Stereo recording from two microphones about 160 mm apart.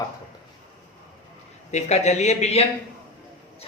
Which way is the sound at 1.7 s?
45° left (ahead or behind).